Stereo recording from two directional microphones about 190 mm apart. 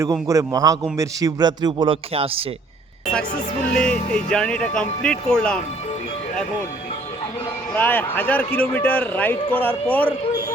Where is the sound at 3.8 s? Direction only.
5° left (ahead or behind).